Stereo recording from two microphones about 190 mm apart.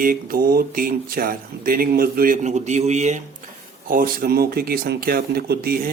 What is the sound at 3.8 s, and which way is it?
Speech, 50° right (ahead or behind).